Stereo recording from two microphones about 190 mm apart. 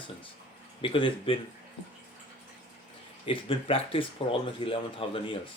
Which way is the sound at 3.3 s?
30° left (ahead or behind).